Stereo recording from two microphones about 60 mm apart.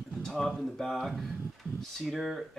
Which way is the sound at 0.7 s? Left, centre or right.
Centre.